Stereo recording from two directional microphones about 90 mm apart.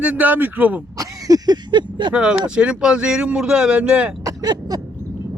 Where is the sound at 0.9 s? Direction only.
40° right (ahead or behind).